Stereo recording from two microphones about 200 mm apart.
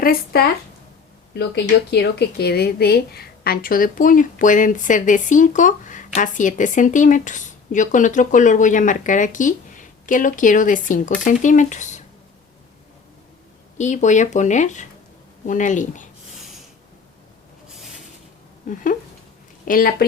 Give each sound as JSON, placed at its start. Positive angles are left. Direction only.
{"t": 0.0, "sound": "speech", "side_deg": 45}
{"t": 13.7, "sound": "speech", "side_deg": 35}
{"t": 19.6, "sound": "speech", "side_deg": 45}